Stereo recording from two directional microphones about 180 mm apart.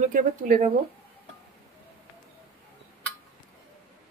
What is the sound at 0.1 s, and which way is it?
Speech, 50° right (ahead or behind).